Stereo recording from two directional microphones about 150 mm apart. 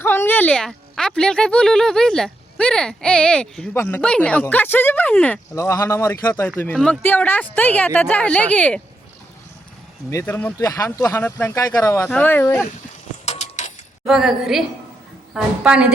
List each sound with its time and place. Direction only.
0.0 s a woman's voice: 15° left (ahead or behind)
5.5 s speech: 20° left (ahead or behind)
6.7 s a woman's voice: centre (ahead or behind)
7.0 s speech: 15° left (ahead or behind)
10.1 s speech: 15° left (ahead or behind)
13.2 s a sound: 45° left (ahead or behind)
14.0 s a woman's voice: centre (ahead or behind)